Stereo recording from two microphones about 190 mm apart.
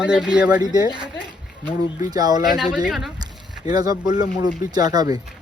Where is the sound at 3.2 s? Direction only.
20° right (ahead or behind).